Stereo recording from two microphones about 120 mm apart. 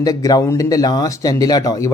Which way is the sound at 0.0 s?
30° left (ahead or behind).